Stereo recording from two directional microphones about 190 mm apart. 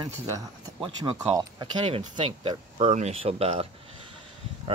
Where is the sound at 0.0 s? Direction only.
25° right (ahead or behind).